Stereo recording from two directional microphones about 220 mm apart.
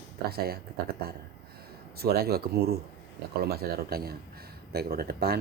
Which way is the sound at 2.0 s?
45° right (ahead or behind).